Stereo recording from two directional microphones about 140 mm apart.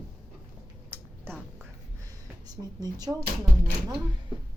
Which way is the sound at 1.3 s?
15° right (ahead or behind).